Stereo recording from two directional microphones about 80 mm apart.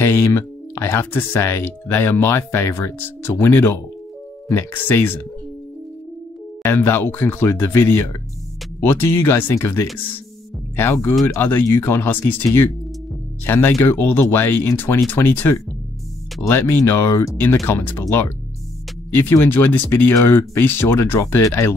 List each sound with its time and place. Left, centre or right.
0.0 s speech: left
6.6 s speech: left
19.1 s speech: left
21.2 s speech: left